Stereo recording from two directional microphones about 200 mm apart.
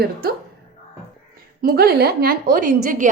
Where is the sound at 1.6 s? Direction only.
50° right (ahead or behind).